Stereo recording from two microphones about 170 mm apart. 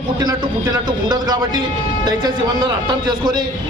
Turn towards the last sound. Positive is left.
turn(degrees=-25)  # may be behind; listen again after turning